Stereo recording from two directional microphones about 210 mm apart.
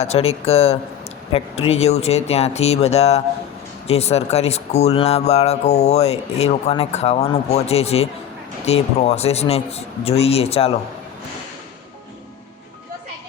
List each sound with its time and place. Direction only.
0.0 s speech: 30° left (ahead or behind)